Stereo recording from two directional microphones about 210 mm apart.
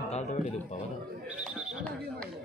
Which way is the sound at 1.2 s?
5° right (ahead or behind).